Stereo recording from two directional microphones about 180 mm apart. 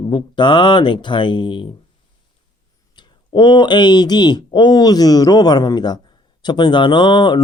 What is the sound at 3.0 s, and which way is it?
Speech, 25° left (ahead or behind).